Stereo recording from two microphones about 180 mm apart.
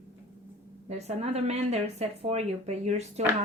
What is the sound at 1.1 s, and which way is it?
Speech, 35° right (ahead or behind).